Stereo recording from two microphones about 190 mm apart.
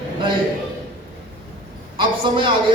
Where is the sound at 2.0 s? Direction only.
25° right (ahead or behind).